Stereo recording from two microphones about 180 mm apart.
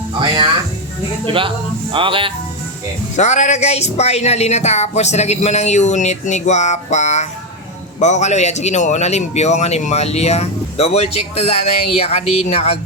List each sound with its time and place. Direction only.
1.3 s speech: 30° right (ahead or behind)
3.2 s speech: 40° left (ahead or behind)